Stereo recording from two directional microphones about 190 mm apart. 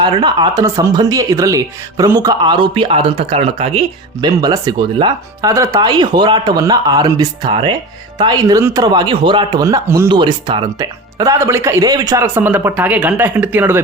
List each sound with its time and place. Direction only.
0.0 s speech: 25° right (ahead or behind)
4.4 s a man's voice: 20° right (ahead or behind)